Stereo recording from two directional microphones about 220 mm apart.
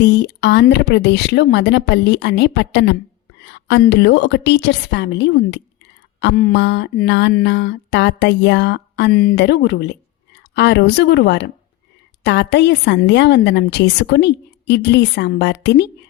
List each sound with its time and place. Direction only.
0.0 s a woman's voice: 50° left (ahead or behind)